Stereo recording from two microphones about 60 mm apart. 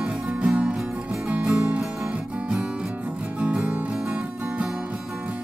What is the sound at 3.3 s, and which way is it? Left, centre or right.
Music, centre.